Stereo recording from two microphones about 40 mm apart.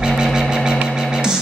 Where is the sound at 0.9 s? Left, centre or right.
Centre.